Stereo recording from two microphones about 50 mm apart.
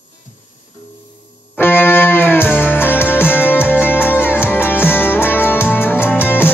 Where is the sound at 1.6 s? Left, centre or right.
Left.